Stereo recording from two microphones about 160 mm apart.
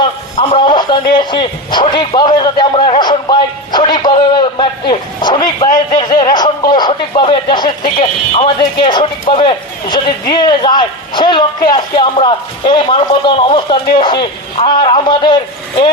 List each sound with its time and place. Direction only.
0.3 s a man's voice: 30° left (ahead or behind)
8.8 s a man's voice: 30° left (ahead or behind)